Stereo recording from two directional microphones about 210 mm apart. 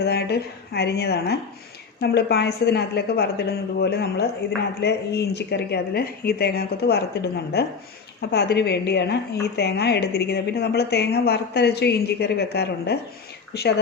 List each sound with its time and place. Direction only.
0.0 s a woman's voice: 50° left (ahead or behind)